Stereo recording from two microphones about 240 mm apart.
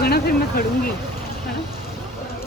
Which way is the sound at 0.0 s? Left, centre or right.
Left.